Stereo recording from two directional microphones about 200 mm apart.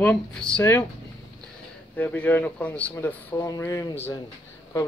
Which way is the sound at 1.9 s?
10° left (ahead or behind).